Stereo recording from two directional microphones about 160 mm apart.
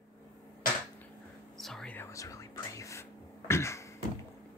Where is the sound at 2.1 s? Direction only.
20° left (ahead or behind).